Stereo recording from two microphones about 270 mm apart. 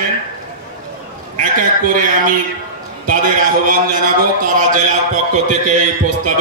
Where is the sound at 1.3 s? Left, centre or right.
Right.